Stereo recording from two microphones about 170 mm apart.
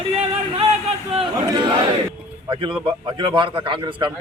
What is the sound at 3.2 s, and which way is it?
Speech, 30° right (ahead or behind).